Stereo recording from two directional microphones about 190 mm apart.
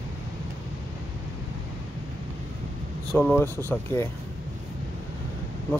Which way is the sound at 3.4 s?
10° left (ahead or behind).